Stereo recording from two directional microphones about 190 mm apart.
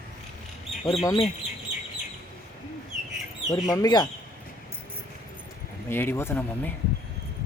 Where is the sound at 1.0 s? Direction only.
20° left (ahead or behind).